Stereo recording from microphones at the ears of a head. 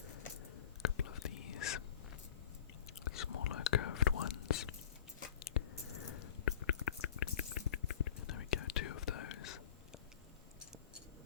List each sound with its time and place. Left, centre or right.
0.0 s whispering: left
3.0 s whispering: left
5.2 s a sound: left